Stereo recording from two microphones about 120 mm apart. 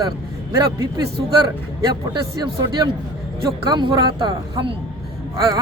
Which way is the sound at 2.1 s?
35° right (ahead or behind).